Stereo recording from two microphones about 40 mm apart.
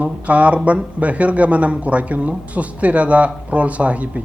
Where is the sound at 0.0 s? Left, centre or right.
Right.